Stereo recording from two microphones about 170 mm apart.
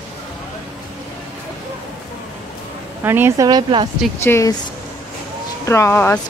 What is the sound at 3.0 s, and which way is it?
Speech, 15° right (ahead or behind).